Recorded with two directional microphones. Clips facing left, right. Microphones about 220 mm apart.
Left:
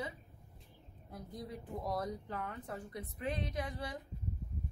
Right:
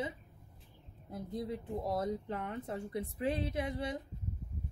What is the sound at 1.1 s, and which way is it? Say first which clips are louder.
Speech: right 7 dB; 25° right (ahead or behind).